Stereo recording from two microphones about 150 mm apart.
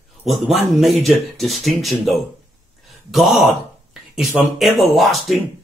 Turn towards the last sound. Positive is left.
turn(degrees=0)  # may be behind; listen again after turning